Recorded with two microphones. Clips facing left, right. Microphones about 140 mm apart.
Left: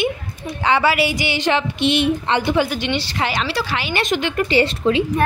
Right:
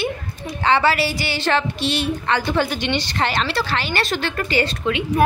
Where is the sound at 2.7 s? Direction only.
5° left (ahead or behind); by 5.0 s 30° left (ahead or behind).